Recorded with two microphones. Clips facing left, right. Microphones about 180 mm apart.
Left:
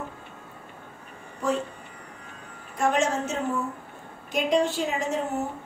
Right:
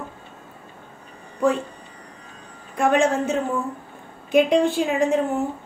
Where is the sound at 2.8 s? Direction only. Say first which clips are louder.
Right 5 dB; 55° right (ahead or behind).